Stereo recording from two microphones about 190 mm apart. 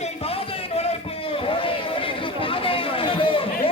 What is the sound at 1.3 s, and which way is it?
Chatter, 30° left (ahead or behind).